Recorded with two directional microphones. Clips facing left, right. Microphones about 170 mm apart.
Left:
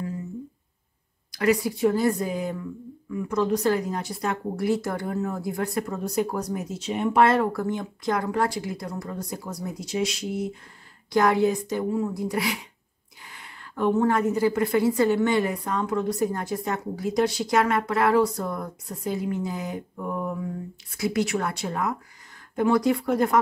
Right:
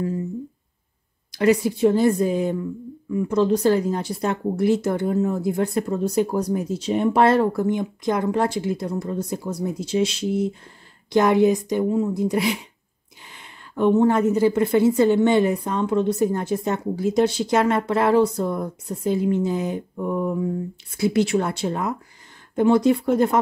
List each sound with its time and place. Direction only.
1.3 s a woman's voice: 25° right (ahead or behind)
7.6 s a woman's voice: 20° right (ahead or behind)